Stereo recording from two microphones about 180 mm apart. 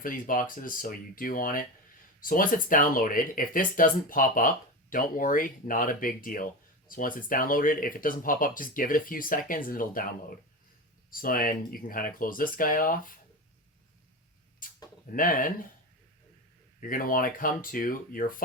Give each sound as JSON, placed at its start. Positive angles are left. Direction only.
{"t": 0.0, "sound": "speech", "side_deg": 50}
{"t": 15.1, "sound": "speech", "side_deg": 50}
{"t": 16.8, "sound": "speech", "side_deg": 50}